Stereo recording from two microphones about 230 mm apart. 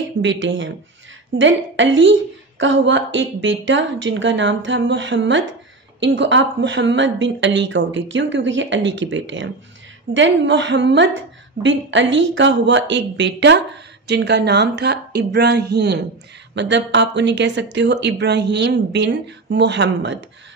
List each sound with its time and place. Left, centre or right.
0.2 s a woman's voice: right